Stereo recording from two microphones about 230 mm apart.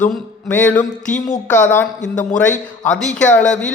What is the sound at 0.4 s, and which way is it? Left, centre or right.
Speech, centre.